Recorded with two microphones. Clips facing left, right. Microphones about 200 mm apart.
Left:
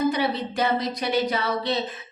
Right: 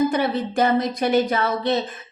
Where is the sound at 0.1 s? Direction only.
50° right (ahead or behind).